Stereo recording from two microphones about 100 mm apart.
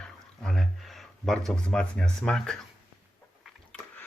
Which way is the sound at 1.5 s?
5° left (ahead or behind).